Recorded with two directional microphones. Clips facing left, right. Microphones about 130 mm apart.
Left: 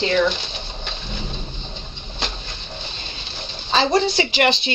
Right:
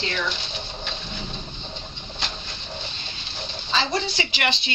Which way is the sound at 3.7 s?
40° left (ahead or behind).